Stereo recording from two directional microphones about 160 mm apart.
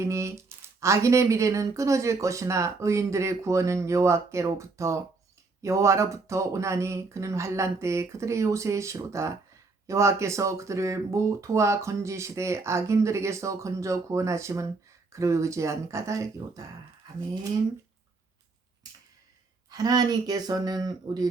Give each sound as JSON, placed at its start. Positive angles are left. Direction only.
{"t": 0.0, "sound": "speech", "side_deg": -20}
{"t": 19.7, "sound": "speech", "side_deg": -25}